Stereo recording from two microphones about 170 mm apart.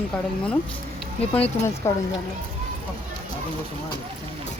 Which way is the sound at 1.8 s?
15° left (ahead or behind).